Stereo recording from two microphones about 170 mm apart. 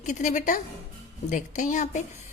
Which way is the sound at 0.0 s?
45° left (ahead or behind).